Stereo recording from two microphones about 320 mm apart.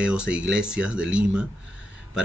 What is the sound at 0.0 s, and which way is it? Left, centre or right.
Speech, centre.